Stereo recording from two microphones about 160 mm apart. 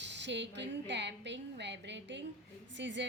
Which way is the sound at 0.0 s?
90° right.